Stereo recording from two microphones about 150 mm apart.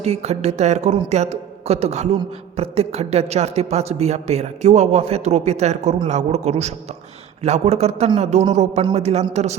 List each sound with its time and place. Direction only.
0.0 s a man's voice: 45° right (ahead or behind)